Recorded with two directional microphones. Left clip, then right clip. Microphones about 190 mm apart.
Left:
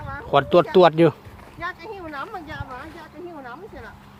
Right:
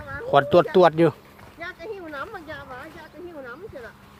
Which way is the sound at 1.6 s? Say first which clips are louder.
Left 3 dB; 45° left (ahead or behind).